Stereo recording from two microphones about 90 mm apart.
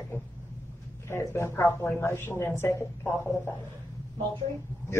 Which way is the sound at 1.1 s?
30° left (ahead or behind).